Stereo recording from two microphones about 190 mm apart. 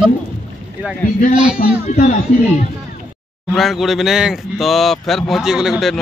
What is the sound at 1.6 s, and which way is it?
Speech, 30° left (ahead or behind).